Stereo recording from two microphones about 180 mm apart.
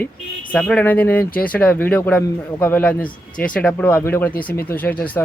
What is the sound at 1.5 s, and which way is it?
Speech, 10° left (ahead or behind).